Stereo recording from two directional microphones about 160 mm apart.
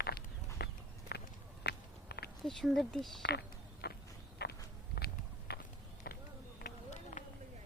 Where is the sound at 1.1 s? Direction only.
90° left.